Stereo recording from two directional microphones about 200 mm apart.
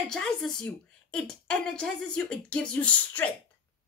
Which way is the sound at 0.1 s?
Centre (ahead or behind).